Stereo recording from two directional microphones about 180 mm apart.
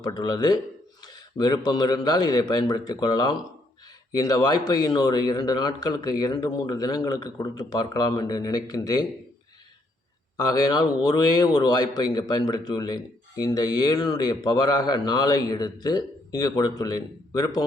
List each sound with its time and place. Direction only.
0.0 s a man's voice: 25° left (ahead or behind)
10.3 s a man's voice: 20° left (ahead or behind)